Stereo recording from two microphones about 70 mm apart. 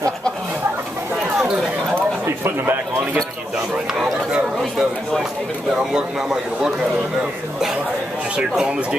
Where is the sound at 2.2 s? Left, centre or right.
Right.